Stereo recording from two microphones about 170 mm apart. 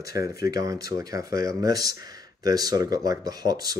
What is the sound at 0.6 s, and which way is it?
Speech, 20° right (ahead or behind).